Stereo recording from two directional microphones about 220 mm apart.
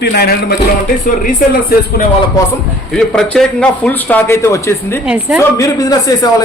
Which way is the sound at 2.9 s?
5° left (ahead or behind).